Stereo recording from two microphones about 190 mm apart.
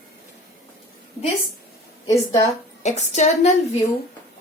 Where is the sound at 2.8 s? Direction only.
40° left (ahead or behind).